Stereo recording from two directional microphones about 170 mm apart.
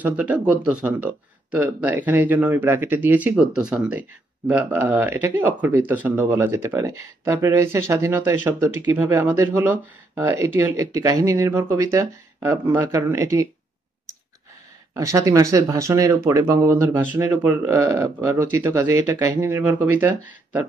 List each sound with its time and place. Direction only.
0.0 s speech: 10° right (ahead or behind)
15.0 s speech: 20° right (ahead or behind)